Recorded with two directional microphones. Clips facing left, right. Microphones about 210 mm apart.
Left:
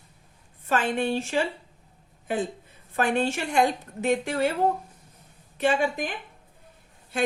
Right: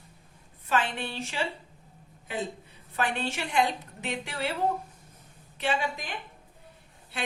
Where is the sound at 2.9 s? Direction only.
45° left (ahead or behind).